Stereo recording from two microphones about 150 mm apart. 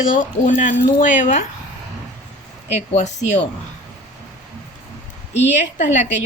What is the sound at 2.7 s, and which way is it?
Speech, 50° left (ahead or behind).